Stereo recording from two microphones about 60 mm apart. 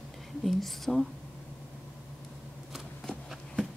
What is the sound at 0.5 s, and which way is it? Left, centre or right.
Speech, centre.